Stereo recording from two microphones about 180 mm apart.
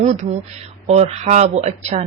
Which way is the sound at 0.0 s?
40° right (ahead or behind).